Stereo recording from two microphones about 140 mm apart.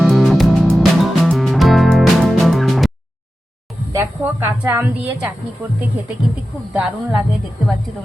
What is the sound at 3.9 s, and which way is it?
Speech, 15° right (ahead or behind).